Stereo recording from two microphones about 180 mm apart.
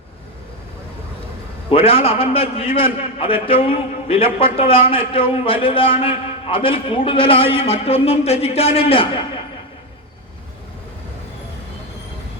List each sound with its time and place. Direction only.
1.7 s a man's voice: 30° left (ahead or behind)